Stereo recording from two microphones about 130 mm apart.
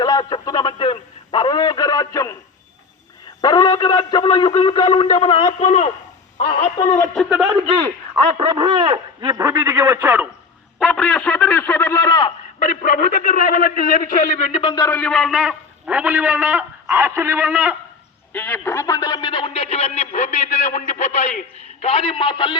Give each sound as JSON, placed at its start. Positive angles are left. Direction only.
{"t": 0.0, "sound": "speech", "side_deg": 30}
{"t": 3.4, "sound": "speech", "side_deg": 30}
{"t": 5.5, "sound": "speech", "side_deg": 65}
{"t": 8.4, "sound": "a man's voice", "side_deg": -40}
{"t": 10.8, "sound": "speech", "side_deg": 5}
{"t": 12.5, "sound": "a man's voice", "side_deg": 90}
{"t": 14.5, "sound": "speech", "side_deg": 35}
{"t": 14.8, "sound": "speech", "side_deg": 15}
{"t": 15.1, "sound": "a man's voice", "side_deg": 0}
{"t": 18.3, "sound": "speech", "side_deg": 10}